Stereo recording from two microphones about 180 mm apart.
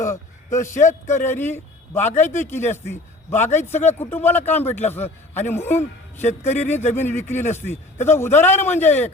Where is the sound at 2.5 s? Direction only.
10° left (ahead or behind).